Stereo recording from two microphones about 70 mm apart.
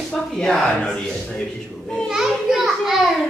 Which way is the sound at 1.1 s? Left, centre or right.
Centre.